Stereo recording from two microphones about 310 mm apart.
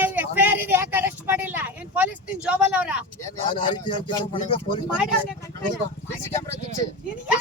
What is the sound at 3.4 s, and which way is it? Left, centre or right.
A man's voice, centre.